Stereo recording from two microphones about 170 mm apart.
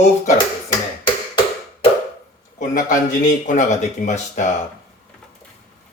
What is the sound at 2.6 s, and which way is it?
Speech, 50° left (ahead or behind).